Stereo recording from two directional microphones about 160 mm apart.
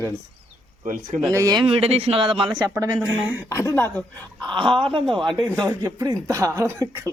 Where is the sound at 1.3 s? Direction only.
25° right (ahead or behind).